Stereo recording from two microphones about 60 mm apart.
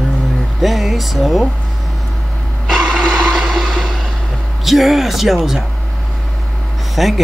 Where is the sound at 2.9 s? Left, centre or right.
Centre.